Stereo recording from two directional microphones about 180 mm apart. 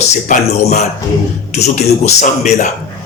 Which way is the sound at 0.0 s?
35° left (ahead or behind).